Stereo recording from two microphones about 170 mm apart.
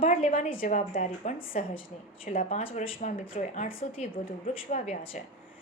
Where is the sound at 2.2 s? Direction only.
55° left (ahead or behind).